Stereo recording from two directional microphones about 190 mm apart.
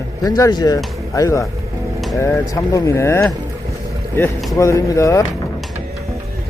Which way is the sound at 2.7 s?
15° left (ahead or behind).